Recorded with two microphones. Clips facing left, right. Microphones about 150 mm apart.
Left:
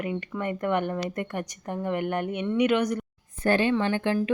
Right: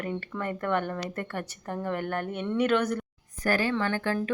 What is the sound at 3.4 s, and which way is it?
Speech, 25° left (ahead or behind).